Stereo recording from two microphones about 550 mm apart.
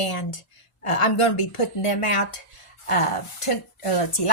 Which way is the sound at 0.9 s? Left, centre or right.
Left.